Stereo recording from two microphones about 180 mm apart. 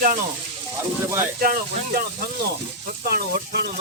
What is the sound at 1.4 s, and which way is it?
Speech, 55° right (ahead or behind).